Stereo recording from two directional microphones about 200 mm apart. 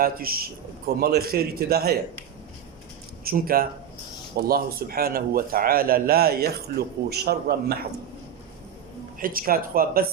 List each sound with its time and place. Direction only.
0.0 s a man's voice: 45° right (ahead or behind)
3.2 s a man's voice: 45° right (ahead or behind)
9.1 s a man's voice: 45° right (ahead or behind)